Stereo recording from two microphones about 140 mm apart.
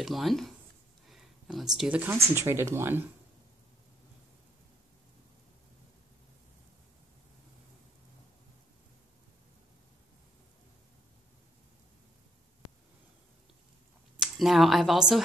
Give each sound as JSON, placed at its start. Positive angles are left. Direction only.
{"t": 0.0, "sound": "speech", "side_deg": 0}
{"t": 1.0, "sound": "a sound", "side_deg": 0}
{"t": 2.3, "sound": "speech", "side_deg": -20}
{"t": 14.2, "sound": "speech", "side_deg": 0}